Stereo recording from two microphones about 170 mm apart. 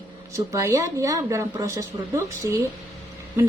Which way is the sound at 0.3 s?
20° right (ahead or behind).